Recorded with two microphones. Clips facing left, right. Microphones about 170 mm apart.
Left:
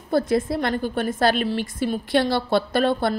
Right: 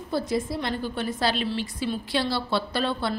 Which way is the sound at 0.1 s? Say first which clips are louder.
Left 6 dB; 55° left (ahead or behind).